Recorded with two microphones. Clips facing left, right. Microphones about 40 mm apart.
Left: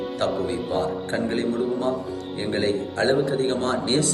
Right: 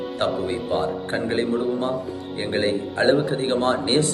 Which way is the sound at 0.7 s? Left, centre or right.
Right.